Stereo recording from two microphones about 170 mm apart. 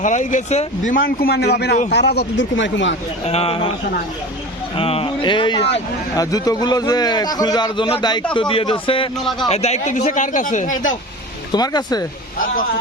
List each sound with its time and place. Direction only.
0.0 s speech: 45° left (ahead or behind); by 1.5 s 65° left (ahead or behind)
1.5 s a man's voice: 75° left (ahead or behind)
3.2 s speech: 35° left (ahead or behind)
4.8 s a man's voice: 35° left (ahead or behind)
11.5 s a man's voice: 25° left (ahead or behind)